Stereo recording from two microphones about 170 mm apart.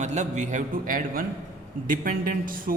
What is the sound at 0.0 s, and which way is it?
A man's voice, 45° right (ahead or behind).